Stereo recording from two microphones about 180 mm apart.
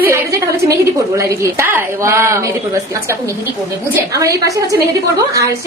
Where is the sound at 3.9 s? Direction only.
15° right (ahead or behind).